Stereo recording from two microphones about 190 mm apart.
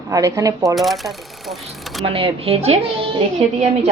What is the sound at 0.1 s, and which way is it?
Speech, 20° right (ahead or behind).